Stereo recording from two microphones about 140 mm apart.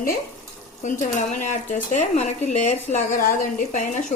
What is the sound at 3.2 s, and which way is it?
Speech, 85° left.